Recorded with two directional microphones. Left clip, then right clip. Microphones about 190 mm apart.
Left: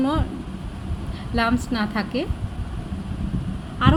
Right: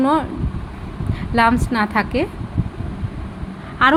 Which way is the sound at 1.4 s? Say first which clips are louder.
Right 7 dB; 15° right (ahead or behind).